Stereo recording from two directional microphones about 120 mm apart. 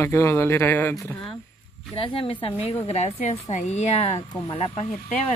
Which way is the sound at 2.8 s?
65° left (ahead or behind).